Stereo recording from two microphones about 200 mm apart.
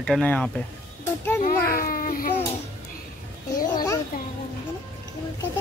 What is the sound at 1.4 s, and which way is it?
Speech, 45° left (ahead or behind).